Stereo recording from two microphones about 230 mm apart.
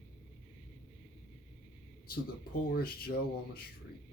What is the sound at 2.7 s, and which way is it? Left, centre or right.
Speech, left.